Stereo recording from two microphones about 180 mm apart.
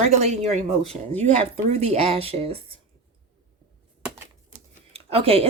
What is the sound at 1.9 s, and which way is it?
Speech, 35° right (ahead or behind).